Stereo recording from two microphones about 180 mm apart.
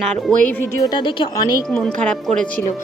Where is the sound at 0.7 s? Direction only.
25° left (ahead or behind).